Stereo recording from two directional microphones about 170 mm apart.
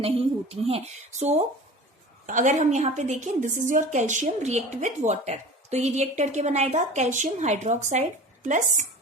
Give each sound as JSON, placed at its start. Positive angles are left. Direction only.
{"t": 0.0, "sound": "a woman's voice", "side_deg": -35}